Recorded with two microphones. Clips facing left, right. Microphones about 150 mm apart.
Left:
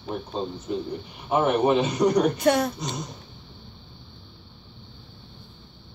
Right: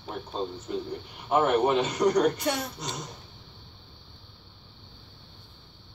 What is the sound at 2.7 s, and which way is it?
Speech, 10° left (ahead or behind).